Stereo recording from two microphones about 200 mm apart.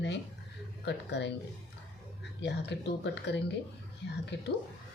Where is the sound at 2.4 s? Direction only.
60° left (ahead or behind).